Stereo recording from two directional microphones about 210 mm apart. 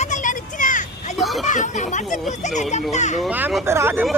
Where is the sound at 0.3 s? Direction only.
40° left (ahead or behind).